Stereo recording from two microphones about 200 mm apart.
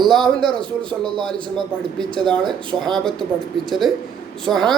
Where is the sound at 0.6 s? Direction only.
25° right (ahead or behind).